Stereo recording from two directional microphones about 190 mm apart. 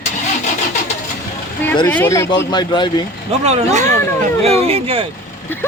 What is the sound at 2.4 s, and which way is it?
Speech, 20° left (ahead or behind).